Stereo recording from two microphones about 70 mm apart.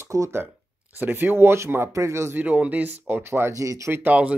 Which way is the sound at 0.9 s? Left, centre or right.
Right.